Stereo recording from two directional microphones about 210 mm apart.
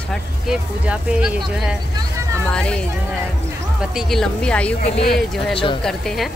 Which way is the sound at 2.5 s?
5° left (ahead or behind).